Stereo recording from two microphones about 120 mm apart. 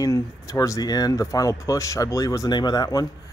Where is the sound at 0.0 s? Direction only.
25° left (ahead or behind).